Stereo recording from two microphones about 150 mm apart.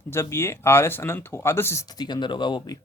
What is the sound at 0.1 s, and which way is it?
Speech, 15° left (ahead or behind).